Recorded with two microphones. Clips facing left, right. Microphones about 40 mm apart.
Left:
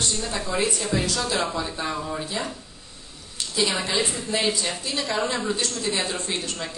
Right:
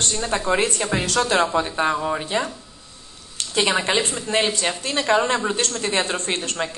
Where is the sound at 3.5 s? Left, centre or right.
Right.